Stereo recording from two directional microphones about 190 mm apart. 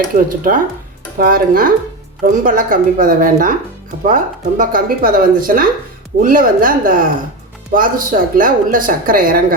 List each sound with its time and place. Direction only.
0.4 s a woman's voice: 45° right (ahead or behind)